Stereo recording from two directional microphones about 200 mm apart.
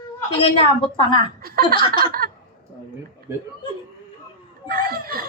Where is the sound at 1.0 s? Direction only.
25° left (ahead or behind).